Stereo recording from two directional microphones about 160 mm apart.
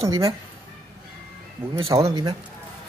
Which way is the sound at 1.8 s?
35° right (ahead or behind).